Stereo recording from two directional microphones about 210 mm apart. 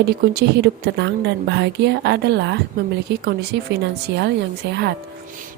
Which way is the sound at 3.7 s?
55° right (ahead or behind).